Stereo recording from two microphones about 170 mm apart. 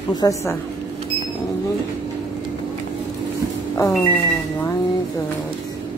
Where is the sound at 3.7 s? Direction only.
15° left (ahead or behind).